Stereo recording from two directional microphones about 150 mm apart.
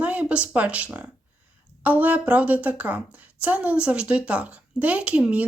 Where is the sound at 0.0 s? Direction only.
10° right (ahead or behind).